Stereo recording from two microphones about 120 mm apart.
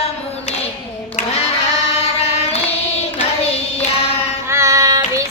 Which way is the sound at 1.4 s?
60° left (ahead or behind).